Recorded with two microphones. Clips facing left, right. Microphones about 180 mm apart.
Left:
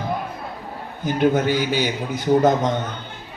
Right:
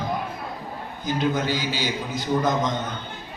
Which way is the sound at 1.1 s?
55° left (ahead or behind).